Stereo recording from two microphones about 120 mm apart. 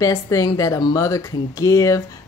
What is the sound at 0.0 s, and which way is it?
Speech, 30° left (ahead or behind).